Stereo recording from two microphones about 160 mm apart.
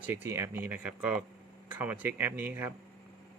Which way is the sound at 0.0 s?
15° right (ahead or behind).